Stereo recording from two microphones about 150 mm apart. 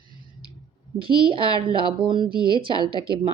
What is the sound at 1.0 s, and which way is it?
Speech, 35° right (ahead or behind).